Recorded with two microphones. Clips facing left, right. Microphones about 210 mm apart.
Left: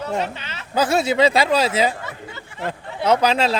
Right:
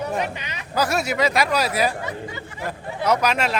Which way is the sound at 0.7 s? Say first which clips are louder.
Left 4 dB; 25° left (ahead or behind).